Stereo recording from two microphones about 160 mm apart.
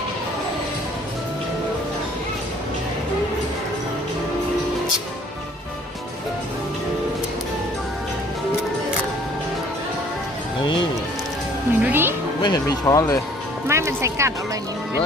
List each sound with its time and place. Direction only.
11.8 s music: 10° right (ahead or behind)
12.4 s speech: 20° left (ahead or behind)
13.7 s speech: 15° right (ahead or behind)